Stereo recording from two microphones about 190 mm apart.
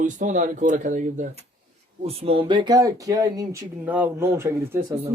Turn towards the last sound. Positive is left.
turn(degrees=-15)  # may be behind; listen again after turning